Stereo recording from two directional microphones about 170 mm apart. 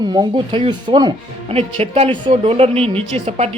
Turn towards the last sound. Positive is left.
turn(degrees=-35)  # may be behind; listen again after turning